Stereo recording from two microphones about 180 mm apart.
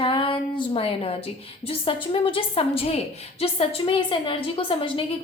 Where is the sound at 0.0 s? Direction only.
30° left (ahead or behind).